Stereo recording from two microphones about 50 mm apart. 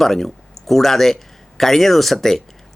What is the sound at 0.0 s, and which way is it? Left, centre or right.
Speech, centre.